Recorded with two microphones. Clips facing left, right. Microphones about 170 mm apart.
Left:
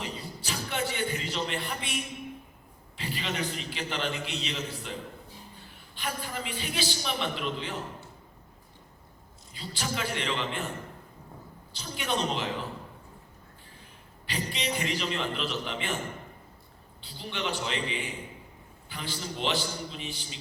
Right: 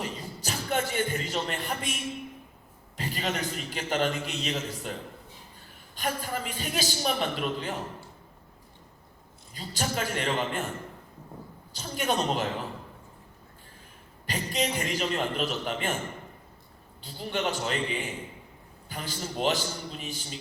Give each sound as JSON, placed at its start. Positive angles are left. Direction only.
{"t": 0.0, "sound": "a sound", "side_deg": -40}
{"t": 3.0, "sound": "a man's voice", "side_deg": -40}
{"t": 9.6, "sound": "a man's voice", "side_deg": -45}
{"t": 11.7, "sound": "a man's voice", "side_deg": -45}
{"t": 14.3, "sound": "a man's voice", "side_deg": -45}
{"t": 17.0, "sound": "a man's voice", "side_deg": -40}